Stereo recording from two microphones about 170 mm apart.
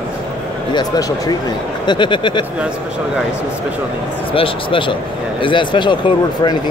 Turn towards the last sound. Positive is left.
turn(degrees=25)  # may be behind; listen again after turning